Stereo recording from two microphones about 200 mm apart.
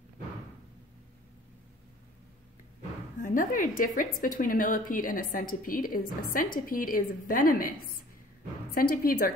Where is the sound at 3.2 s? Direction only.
40° left (ahead or behind).